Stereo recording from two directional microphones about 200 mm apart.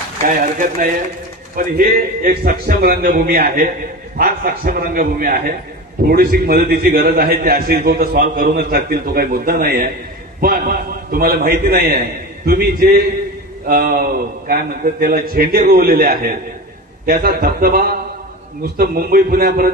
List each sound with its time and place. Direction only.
0.2 s a man's voice: 40° right (ahead or behind)